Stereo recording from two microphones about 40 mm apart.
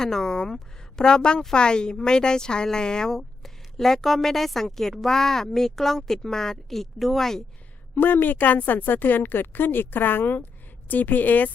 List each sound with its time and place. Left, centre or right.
0.0 s a woman's voice: centre
3.1 s a woman's voice: centre
7.9 s speech: left